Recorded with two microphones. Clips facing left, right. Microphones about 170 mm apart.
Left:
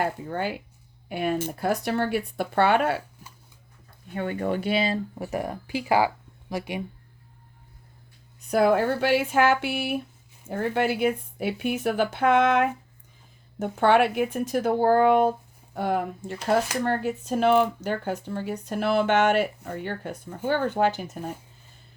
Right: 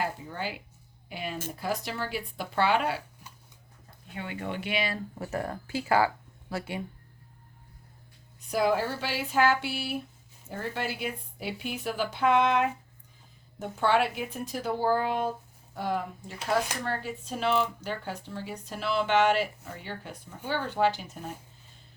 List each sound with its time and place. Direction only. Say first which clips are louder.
0.0 s speech: left 6 dB; 55° left (ahead or behind)
4.1 s speech: left 8 dB; 50° left (ahead or behind); by 4.9 s 30° left (ahead or behind)
5.2 s speech: left 3 dB; 15° left (ahead or behind)
8.4 s speech: left 6 dB; 55° left (ahead or behind)